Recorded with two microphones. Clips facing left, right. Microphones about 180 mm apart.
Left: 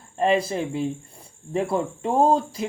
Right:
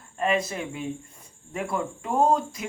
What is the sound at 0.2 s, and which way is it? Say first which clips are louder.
Speech: left 4 dB; 30° left (ahead or behind).